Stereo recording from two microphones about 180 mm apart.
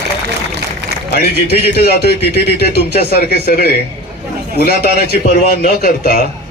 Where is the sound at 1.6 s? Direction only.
60° left (ahead or behind).